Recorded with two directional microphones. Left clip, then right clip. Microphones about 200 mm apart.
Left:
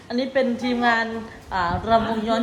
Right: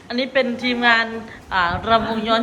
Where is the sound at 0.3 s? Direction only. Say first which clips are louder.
Right 2 dB; 15° left (ahead or behind).